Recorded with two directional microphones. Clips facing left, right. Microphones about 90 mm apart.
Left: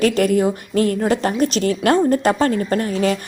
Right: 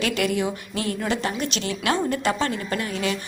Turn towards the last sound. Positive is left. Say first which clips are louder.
# left 7 dB
turn(degrees=40)  # may be behind; listen again after turning